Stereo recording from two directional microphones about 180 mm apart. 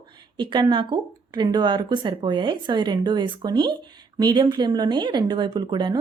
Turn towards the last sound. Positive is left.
turn(degrees=-25)  # may be behind; listen again after turning